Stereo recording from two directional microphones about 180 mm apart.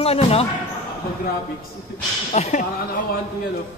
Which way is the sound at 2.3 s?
40° left (ahead or behind).